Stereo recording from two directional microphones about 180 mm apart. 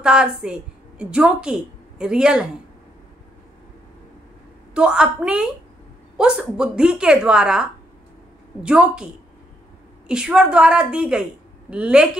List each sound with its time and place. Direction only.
0.0 s a woman's voice: 5° right (ahead or behind)
4.7 s speech: 5° right (ahead or behind)
8.6 s speech: 5° right (ahead or behind)